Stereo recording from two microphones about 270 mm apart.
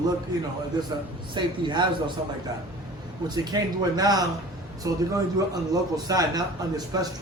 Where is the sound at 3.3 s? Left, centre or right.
Centre.